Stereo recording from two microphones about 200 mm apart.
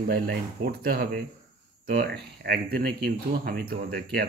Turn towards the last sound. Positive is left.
turn(degrees=-50)  # may be behind; listen again after turning